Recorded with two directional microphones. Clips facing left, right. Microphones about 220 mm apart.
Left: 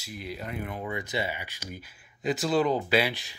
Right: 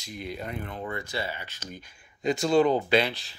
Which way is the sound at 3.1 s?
15° left (ahead or behind).